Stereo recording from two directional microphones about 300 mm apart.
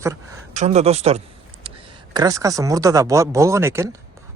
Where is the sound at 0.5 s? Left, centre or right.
Right.